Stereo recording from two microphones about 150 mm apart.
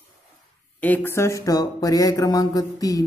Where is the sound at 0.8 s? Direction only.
10° left (ahead or behind).